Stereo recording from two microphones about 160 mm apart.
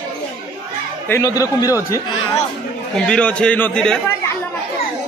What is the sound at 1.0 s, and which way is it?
Speech, 20° left (ahead or behind).